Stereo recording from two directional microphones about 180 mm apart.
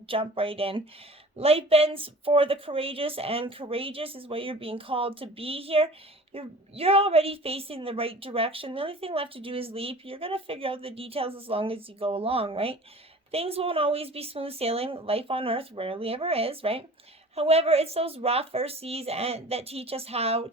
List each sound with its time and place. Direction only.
0.1 s a woman's voice: 30° right (ahead or behind)